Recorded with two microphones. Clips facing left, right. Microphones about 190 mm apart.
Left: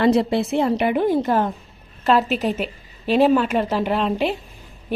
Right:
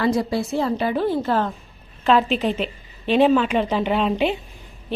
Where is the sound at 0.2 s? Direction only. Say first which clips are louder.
Left 3 dB; 25° left (ahead or behind); by 4.4 s centre (ahead or behind).